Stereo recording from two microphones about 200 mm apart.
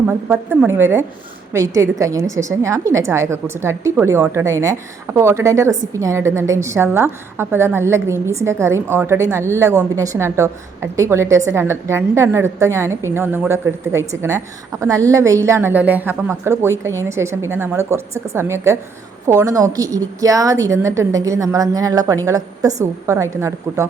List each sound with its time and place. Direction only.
0.3 s a woman's voice: 10° right (ahead or behind)